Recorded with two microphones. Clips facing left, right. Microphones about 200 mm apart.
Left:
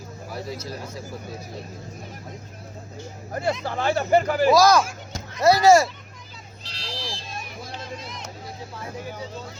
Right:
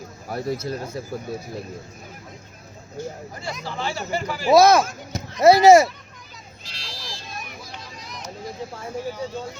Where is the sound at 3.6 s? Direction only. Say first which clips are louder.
Left 5 dB; 55° left (ahead or behind).